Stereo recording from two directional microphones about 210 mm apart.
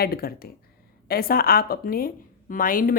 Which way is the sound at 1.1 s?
45° left (ahead or behind).